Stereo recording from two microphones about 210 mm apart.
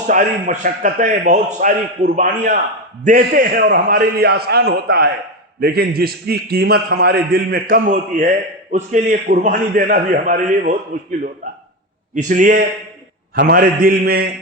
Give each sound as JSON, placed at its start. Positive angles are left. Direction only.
{"t": 0.1, "sound": "a man's voice", "side_deg": -35}
{"t": 12.1, "sound": "a man's voice", "side_deg": -40}